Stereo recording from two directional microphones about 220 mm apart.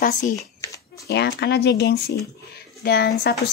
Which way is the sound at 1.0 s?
50° left (ahead or behind).